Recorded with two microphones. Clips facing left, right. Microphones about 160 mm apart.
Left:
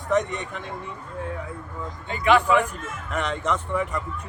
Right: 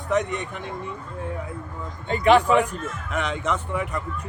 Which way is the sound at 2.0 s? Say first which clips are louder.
Right 2 dB; 35° right (ahead or behind).